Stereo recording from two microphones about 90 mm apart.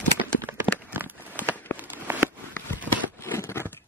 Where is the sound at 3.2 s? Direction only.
30° left (ahead or behind).